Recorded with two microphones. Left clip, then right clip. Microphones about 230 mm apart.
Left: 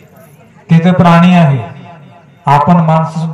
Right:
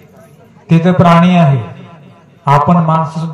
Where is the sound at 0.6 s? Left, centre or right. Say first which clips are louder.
Even; left.